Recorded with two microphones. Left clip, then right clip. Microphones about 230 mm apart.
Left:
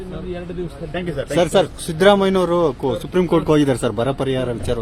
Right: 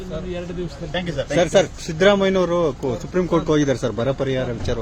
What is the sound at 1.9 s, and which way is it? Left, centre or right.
A man's voice, left.